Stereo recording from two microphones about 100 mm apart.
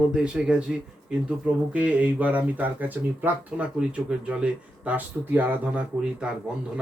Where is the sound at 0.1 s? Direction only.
10° right (ahead or behind).